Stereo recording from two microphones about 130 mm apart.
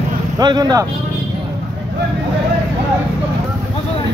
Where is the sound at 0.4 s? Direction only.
30° right (ahead or behind).